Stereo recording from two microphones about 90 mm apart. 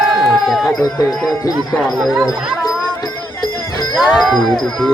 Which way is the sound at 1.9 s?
Centre (ahead or behind).